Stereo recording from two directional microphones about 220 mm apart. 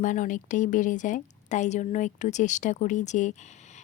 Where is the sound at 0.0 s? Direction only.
35° left (ahead or behind).